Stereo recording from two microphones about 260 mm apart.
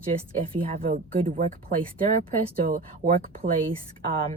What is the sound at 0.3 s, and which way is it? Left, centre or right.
Speech, right.